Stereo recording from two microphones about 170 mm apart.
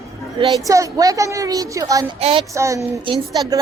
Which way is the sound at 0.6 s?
20° right (ahead or behind).